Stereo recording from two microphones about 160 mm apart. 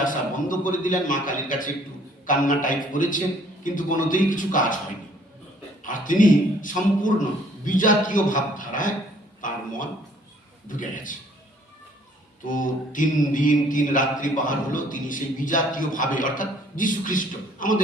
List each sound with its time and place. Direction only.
0.0 s mantra: 55° left (ahead or behind)
5.8 s mantra: 55° left (ahead or behind)
12.5 s mantra: 55° left (ahead or behind)